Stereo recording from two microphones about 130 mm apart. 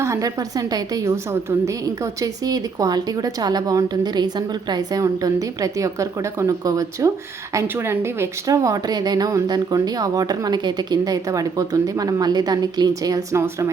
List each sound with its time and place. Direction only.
0.0 s a woman's voice: 25° right (ahead or behind)